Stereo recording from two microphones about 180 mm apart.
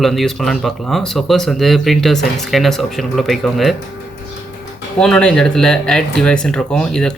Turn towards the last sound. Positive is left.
turn(degrees=5)  # may be behind; listen again after turning